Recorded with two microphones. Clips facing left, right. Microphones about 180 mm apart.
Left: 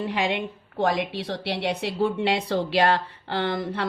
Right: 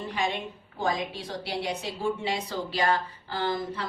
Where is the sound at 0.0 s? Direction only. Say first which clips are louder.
Left 5 dB; 65° left (ahead or behind).